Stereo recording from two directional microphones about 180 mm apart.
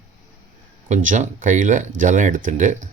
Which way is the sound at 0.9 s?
45° right (ahead or behind).